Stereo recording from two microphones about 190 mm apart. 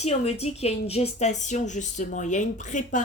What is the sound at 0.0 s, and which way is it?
A woman's voice, 35° left (ahead or behind).